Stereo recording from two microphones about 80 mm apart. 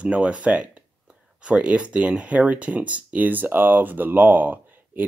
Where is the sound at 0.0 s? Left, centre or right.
Centre.